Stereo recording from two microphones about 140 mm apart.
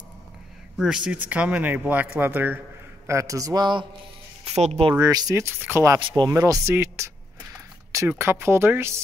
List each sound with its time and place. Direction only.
0.7 s speech: 5° right (ahead or behind); by 3.8 s 30° right (ahead or behind)
4.6 s speech: 45° right (ahead or behind); by 5.9 s 15° right (ahead or behind)
5.9 s speech: 30° right (ahead or behind)
8.1 s speech: 15° right (ahead or behind)